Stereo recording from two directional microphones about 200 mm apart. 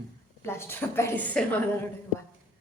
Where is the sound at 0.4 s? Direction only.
10° left (ahead or behind).